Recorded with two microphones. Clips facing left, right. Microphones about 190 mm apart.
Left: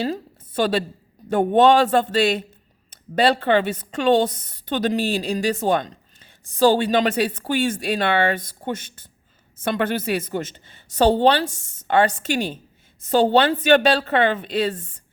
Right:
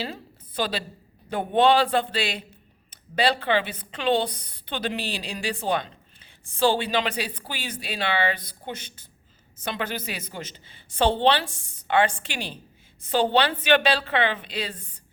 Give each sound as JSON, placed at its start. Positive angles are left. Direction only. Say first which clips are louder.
{"t": 0.0, "sound": "a woman's voice", "louder": "left 8 dB", "side_deg": 45}